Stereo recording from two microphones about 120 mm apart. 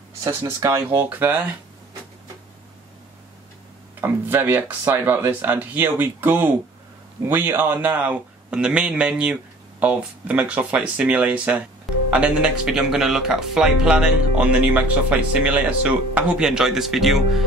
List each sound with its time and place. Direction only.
0.3 s speech: 25° right (ahead or behind)
4.0 s speech: 15° right (ahead or behind)